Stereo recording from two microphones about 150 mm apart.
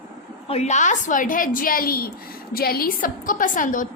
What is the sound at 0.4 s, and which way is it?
A woman's voice, 45° left (ahead or behind).